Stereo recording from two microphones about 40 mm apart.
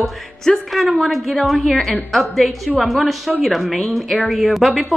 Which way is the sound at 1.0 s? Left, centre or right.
Centre.